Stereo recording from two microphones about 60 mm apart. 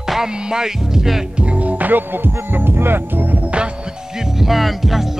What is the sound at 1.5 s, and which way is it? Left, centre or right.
Speech, right.